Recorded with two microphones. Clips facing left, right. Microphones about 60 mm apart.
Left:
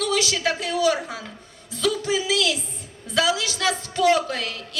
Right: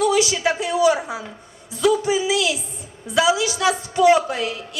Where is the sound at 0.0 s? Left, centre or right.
Centre.